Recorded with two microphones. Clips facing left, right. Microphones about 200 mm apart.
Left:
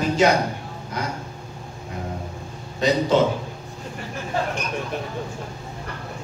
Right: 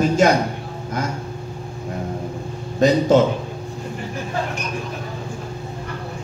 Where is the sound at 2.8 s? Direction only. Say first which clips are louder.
Right 5 dB; 45° right (ahead or behind).